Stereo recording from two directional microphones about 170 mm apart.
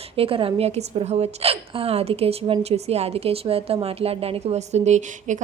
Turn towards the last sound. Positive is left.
turn(degrees=-45)  # may be behind; listen again after turning